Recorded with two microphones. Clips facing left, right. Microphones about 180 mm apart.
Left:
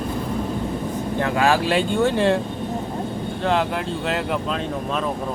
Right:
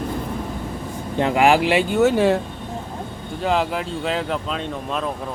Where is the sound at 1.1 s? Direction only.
20° right (ahead or behind); by 5.1 s centre (ahead or behind).